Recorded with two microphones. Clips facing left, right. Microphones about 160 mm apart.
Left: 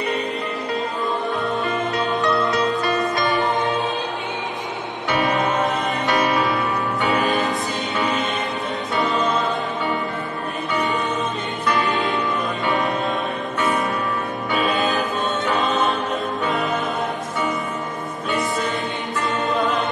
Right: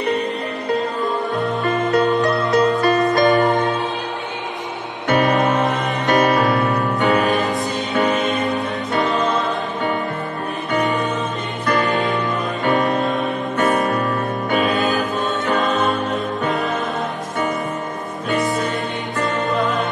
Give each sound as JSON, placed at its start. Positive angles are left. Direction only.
{"t": 1.6, "sound": "music", "side_deg": -45}
{"t": 5.0, "sound": "music", "side_deg": -45}
{"t": 7.2, "sound": "music", "side_deg": 0}
{"t": 7.9, "sound": "music", "side_deg": -50}
{"t": 11.6, "sound": "music", "side_deg": -40}